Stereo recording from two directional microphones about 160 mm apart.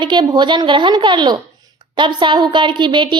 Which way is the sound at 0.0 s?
30° right (ahead or behind).